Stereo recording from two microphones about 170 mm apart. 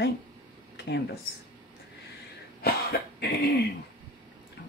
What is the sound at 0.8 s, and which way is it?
Speech, 75° left (ahead or behind).